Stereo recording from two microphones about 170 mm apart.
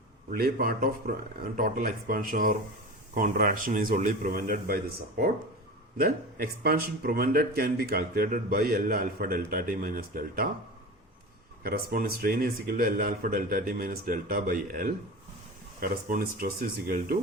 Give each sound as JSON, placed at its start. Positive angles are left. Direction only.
{"t": 0.3, "sound": "speech", "side_deg": -60}
{"t": 11.6, "sound": "speech", "side_deg": -65}